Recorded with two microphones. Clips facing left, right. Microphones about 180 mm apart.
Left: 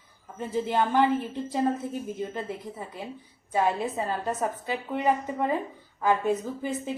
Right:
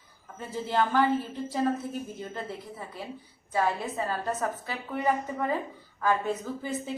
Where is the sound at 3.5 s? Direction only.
20° left (ahead or behind).